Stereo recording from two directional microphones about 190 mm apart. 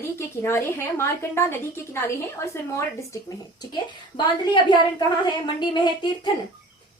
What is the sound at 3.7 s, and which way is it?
A woman's voice, 20° left (ahead or behind).